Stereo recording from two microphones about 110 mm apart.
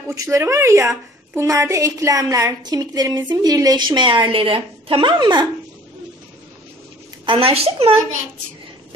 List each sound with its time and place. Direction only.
0.1 s a woman's voice: 30° right (ahead or behind)
7.2 s a woman's voice: 55° right (ahead or behind)